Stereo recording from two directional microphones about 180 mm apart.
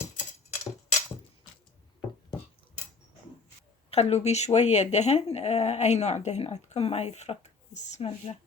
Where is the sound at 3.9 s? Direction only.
35° left (ahead or behind).